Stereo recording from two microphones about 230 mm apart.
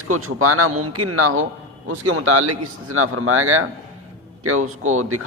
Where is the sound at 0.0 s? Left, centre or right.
Right.